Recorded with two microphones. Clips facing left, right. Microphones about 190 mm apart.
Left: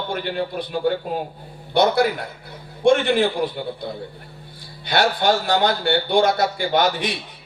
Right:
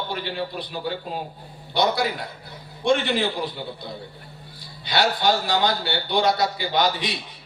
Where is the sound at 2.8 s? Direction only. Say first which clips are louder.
Left 5 dB; 50° left (ahead or behind).